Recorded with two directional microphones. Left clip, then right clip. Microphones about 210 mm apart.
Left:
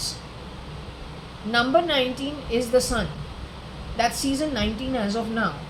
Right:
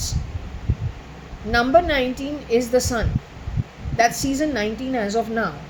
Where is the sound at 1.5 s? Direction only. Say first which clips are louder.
Right 4 dB; 30° right (ahead or behind).